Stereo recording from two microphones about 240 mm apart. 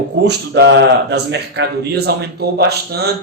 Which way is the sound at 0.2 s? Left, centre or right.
Right.